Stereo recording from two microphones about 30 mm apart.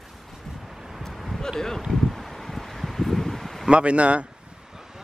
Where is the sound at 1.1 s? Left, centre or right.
Centre.